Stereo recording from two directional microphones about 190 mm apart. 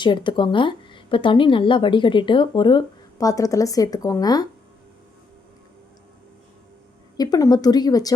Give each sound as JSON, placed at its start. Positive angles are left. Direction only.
{"t": 0.0, "sound": "speech", "side_deg": 25}
{"t": 7.2, "sound": "speech", "side_deg": 20}